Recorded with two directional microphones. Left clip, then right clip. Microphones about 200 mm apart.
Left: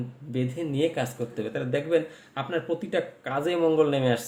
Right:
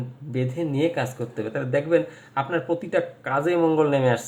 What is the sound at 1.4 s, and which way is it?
Speech, 10° left (ahead or behind).